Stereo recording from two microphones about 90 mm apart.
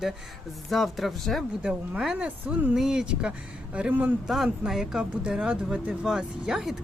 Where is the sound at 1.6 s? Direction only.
10° right (ahead or behind).